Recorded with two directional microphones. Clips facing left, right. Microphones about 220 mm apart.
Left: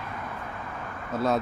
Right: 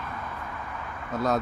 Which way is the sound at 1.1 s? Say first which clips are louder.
Left 1 dB; centre (ahead or behind).